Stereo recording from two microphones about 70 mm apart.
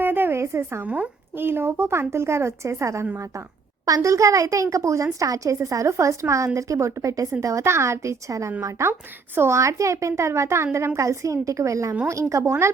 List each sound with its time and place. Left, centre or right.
0.0 s a sound: right
0.4 s speech: right
0.8 s speech: right
3.8 s speech: right